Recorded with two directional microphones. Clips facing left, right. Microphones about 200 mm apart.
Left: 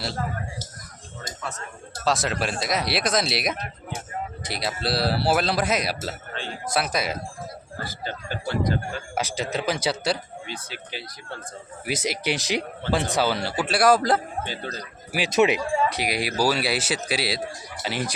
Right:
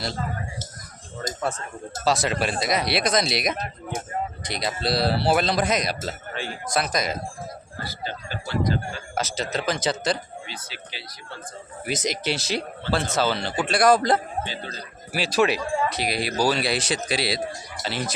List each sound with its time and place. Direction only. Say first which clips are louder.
1.4 s speech: right 7 dB; 30° right (ahead or behind)
2.0 s speech: right 1 dB; centre (ahead or behind)
6.3 s a man's voice: right 4 dB; 10° right (ahead or behind)
6.7 s speech: even; 5° left (ahead or behind)
7.9 s speech: even; 50° left (ahead or behind)
9.1 s speech: even; 10° left (ahead or behind)
10.4 s speech: left 3 dB; 50° left (ahead or behind)
11.9 s speech: even; 10° left (ahead or behind)
14.4 s speech: left 1 dB; 50° left (ahead or behind)
15.1 s speech: left 1 dB; 20° left (ahead or behind)